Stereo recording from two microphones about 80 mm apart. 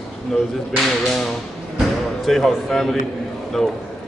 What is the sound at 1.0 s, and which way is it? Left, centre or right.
A man's voice, centre.